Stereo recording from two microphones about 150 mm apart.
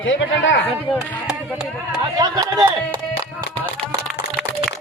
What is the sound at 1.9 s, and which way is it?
Speech, 25° right (ahead or behind).